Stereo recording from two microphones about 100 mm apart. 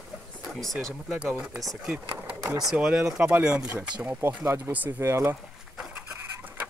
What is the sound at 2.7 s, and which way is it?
Speech, 5° right (ahead or behind).